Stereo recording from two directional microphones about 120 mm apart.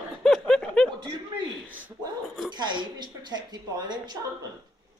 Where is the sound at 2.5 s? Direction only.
35° right (ahead or behind).